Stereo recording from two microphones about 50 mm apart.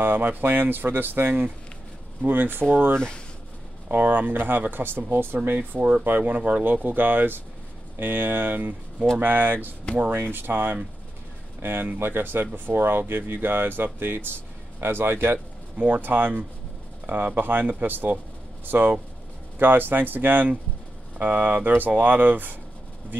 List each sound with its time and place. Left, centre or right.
0.0 s speech: right
15.8 s speech: right